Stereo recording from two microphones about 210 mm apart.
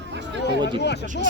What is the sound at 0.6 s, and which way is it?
Speech, 55° left (ahead or behind).